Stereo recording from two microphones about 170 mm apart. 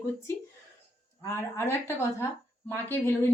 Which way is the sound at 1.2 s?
15° left (ahead or behind).